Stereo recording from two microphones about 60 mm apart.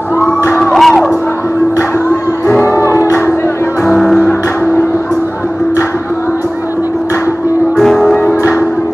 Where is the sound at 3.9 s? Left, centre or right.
Centre.